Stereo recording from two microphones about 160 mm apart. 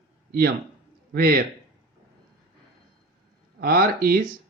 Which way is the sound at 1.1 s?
70° right (ahead or behind).